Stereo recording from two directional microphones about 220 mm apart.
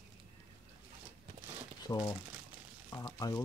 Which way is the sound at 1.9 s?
15° left (ahead or behind).